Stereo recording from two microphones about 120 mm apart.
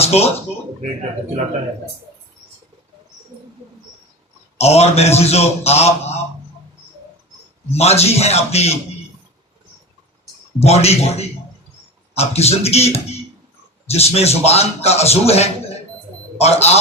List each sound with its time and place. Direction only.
0.0 s speech: 60° left (ahead or behind)
4.5 s a man's voice: 60° left (ahead or behind)
7.8 s a man's voice: 60° left (ahead or behind)
10.6 s a man's voice: 60° left (ahead or behind)